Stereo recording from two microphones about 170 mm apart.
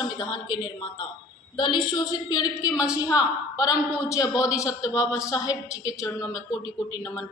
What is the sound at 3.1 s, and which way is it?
A woman's voice, 20° left (ahead or behind).